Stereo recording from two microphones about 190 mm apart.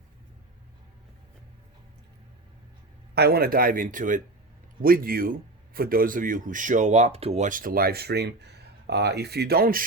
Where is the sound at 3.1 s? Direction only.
55° right (ahead or behind).